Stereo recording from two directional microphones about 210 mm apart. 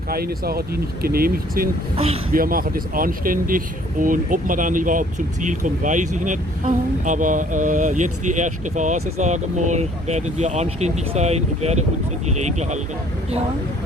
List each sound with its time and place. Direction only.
0.1 s speech: 45° right (ahead or behind)